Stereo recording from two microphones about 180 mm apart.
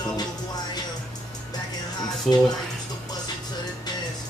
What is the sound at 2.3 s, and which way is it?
Speech, centre (ahead or behind).